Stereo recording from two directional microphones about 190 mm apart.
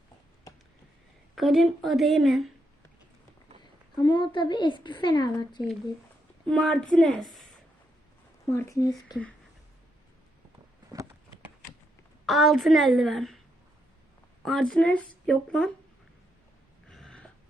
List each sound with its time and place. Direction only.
1.4 s speech: centre (ahead or behind)
3.9 s a woman's voice: 25° left (ahead or behind)
6.5 s speech: 5° left (ahead or behind)
8.4 s speech: 15° left (ahead or behind)
10.9 s a sound: 20° right (ahead or behind)
12.2 s speech: centre (ahead or behind)
14.4 s speech: centre (ahead or behind)
16.9 s a sound: centre (ahead or behind)